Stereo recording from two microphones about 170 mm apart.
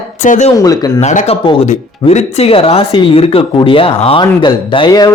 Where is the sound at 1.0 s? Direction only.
45° left (ahead or behind).